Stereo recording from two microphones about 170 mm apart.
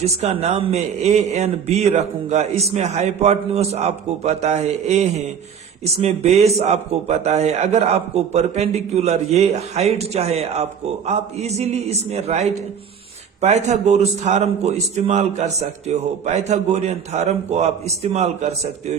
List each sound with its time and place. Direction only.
0.0 s a man's voice: 40° right (ahead or behind)